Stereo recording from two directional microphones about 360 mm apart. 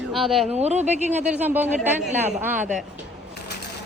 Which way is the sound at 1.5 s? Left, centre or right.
Centre.